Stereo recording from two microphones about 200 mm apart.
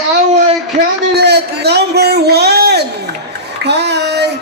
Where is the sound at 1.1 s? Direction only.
55° right (ahead or behind).